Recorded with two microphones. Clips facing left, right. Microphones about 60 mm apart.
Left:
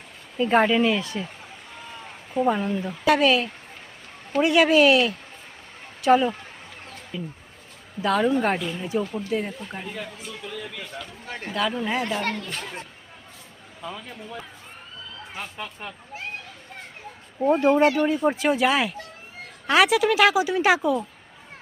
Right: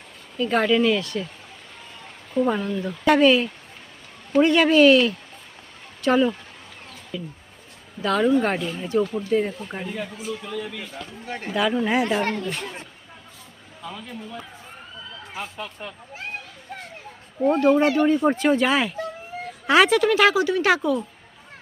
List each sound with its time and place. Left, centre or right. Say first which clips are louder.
0.3 s speech: left 1 dB; left
2.3 s speech: even; centre
3.0 s speech: right 3 dB; centre
7.1 s speech: right 1 dB; left
8.0 s speech: right 1 dB; centre
11.9 s speech: right 4 dB; right
17.5 s speech: even; centre
17.9 s speech: right 3 dB; centre
20.3 s speech: even; centre